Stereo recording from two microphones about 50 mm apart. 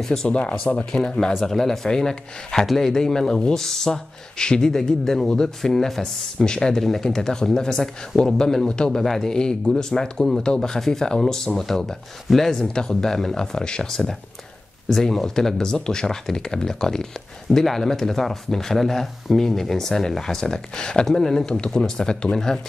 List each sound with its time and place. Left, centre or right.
0.0 s speech: centre
0.3 s speech: left
1.0 s speech: centre